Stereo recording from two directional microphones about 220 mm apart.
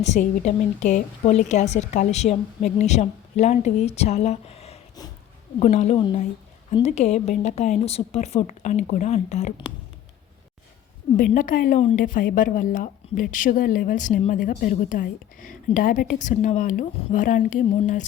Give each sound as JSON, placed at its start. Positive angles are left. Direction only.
{"t": 0.0, "sound": "a woman's voice", "side_deg": 30}
{"t": 11.2, "sound": "a woman's voice", "side_deg": 35}